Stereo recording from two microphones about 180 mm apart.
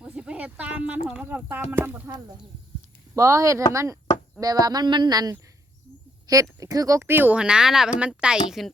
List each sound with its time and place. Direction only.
0.0 s speech: 5° right (ahead or behind)
3.2 s speech: 20° right (ahead or behind); by 8.7 s centre (ahead or behind)